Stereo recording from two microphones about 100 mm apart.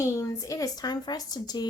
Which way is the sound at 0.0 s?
30° left (ahead or behind).